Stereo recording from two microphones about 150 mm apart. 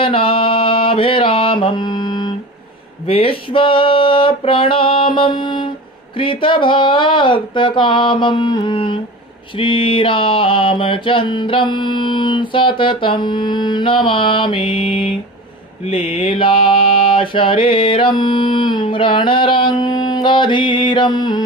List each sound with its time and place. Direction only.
0.0 s mantra: 35° left (ahead or behind)
3.1 s a sound: 40° left (ahead or behind)
6.1 s mantra: 35° left (ahead or behind)